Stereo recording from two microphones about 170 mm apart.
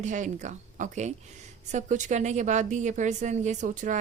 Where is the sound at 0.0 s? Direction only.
45° right (ahead or behind).